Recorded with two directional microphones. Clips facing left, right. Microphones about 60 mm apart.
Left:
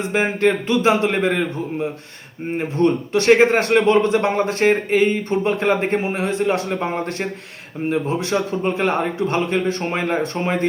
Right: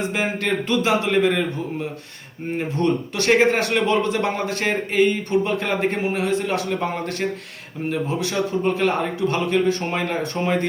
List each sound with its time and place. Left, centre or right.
0.1 s a man's voice: left
2.7 s a man's voice: left